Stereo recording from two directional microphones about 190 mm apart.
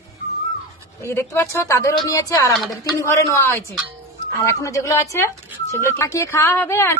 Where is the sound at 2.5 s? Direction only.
Centre (ahead or behind).